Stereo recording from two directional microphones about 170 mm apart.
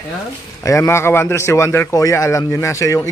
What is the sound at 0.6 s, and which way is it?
A man's voice, 15° left (ahead or behind).